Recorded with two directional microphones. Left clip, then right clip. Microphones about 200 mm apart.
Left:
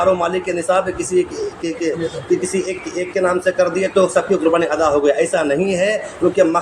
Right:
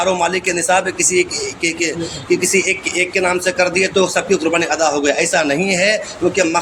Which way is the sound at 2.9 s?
40° right (ahead or behind).